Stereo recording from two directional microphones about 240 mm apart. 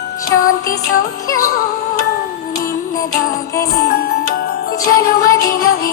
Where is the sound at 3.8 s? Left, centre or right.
Left.